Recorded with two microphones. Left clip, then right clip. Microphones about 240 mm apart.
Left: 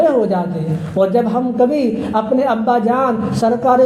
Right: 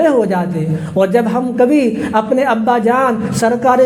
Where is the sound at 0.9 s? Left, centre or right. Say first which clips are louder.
Right 2 dB; right.